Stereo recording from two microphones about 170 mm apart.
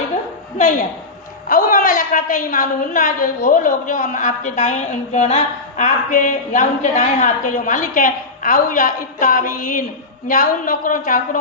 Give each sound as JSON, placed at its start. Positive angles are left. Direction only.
{"t": 1.5, "sound": "a woman's voice", "side_deg": 50}